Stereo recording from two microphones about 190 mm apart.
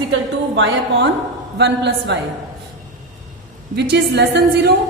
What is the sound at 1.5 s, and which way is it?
Speech, 65° right (ahead or behind).